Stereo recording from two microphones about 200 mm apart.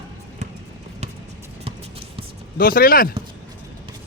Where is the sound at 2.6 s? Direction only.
45° left (ahead or behind).